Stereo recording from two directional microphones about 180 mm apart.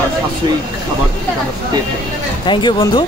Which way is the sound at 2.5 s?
25° left (ahead or behind).